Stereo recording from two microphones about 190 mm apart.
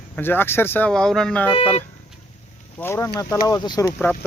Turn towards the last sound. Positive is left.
turn(degrees=20)  # may be behind; listen again after turning